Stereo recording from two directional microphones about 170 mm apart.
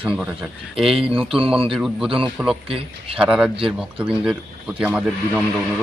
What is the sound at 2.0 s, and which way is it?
A man's voice, 30° right (ahead or behind).